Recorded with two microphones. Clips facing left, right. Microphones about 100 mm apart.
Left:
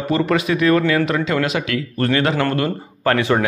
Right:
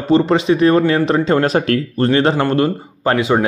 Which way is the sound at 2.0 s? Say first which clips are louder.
Right 3 dB; 25° right (ahead or behind).